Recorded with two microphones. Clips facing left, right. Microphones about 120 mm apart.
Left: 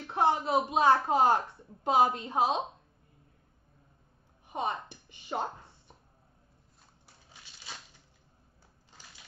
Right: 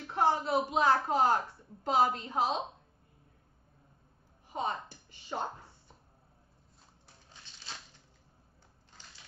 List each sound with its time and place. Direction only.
0.1 s a woman's voice: 20° left (ahead or behind)
4.5 s speech: 20° left (ahead or behind)